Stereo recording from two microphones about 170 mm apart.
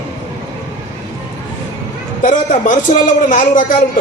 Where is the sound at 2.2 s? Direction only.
50° left (ahead or behind).